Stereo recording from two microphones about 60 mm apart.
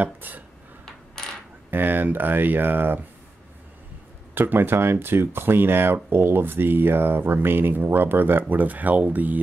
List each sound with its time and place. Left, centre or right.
0.0 s speech: right
0.8 s coin: centre
1.7 s speech: right
4.4 s speech: right